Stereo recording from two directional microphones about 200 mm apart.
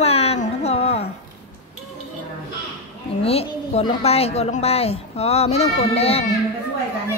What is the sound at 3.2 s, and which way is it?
A woman's voice, 30° left (ahead or behind).